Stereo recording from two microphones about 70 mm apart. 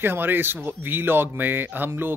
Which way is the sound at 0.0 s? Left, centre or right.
Right.